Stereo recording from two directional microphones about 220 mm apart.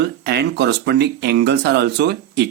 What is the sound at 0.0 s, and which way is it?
Speech, 50° right (ahead or behind).